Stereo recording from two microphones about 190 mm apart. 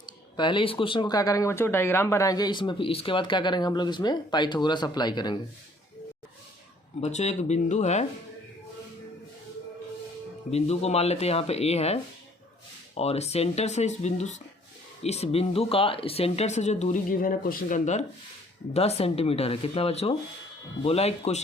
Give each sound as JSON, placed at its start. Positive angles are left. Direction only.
{"t": 0.0, "sound": "speech", "side_deg": 25}
{"t": 7.0, "sound": "speech", "side_deg": 35}
{"t": 10.5, "sound": "speech", "side_deg": 35}